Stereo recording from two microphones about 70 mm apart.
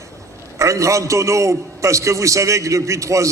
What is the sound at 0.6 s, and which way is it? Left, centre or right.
A man's voice, right.